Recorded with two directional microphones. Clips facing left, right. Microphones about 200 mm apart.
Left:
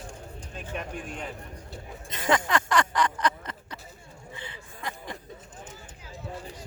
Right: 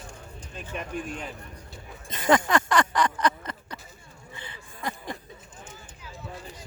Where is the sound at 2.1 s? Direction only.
45° right (ahead or behind).